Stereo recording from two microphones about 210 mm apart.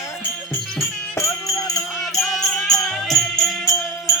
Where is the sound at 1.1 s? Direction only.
15° left (ahead or behind).